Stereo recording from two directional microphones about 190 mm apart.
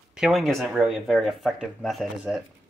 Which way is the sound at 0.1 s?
Centre (ahead or behind).